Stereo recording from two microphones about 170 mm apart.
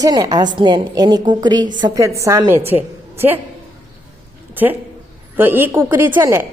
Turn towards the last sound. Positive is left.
turn(degrees=-15)  # may be behind; listen again after turning